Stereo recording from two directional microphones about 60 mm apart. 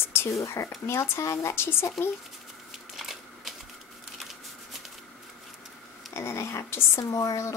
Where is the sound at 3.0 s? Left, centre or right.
Centre.